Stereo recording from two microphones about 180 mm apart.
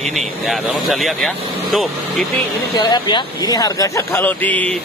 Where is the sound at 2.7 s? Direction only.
25° left (ahead or behind).